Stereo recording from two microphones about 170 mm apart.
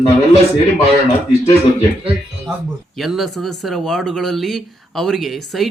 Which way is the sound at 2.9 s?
Centre (ahead or behind).